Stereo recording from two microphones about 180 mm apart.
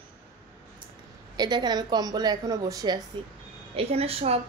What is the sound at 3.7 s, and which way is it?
Speech, 35° right (ahead or behind).